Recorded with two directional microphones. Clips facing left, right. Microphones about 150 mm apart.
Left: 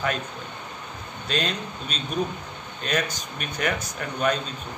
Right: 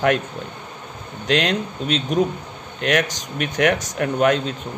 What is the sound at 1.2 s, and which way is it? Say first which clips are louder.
Speech: right 8 dB; 85° right.